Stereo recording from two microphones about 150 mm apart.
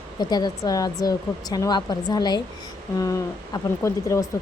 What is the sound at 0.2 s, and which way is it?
Speech, 25° left (ahead or behind).